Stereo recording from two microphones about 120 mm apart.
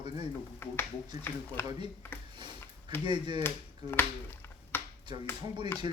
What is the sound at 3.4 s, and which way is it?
Finger snapping, 20° left (ahead or behind).